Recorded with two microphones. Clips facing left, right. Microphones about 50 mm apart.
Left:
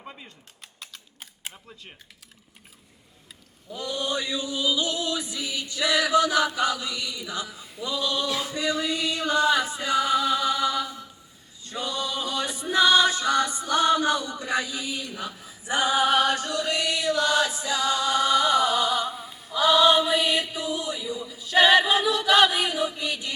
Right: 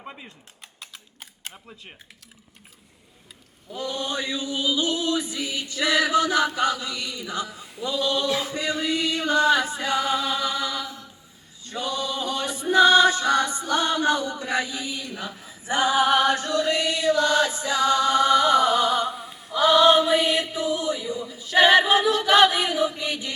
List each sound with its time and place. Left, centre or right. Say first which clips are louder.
0.0 s typing: right 2 dB; centre
0.8 s typing: even; centre
1.5 s speech: right 2 dB; centre
3.7 s chant: even; right
12.5 s music: right 4 dB; right
16.3 s chant: right 3 dB; right